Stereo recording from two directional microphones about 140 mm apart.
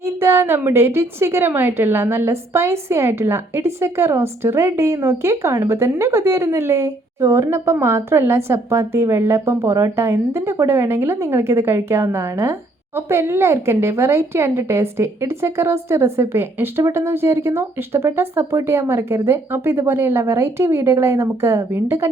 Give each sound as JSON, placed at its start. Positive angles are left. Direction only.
{"t": 0.0, "sound": "a woman's voice", "side_deg": -20}